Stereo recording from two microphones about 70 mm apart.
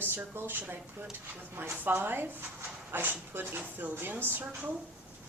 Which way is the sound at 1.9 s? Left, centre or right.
Right.